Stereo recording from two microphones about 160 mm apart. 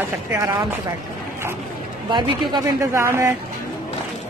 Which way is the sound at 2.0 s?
30° right (ahead or behind).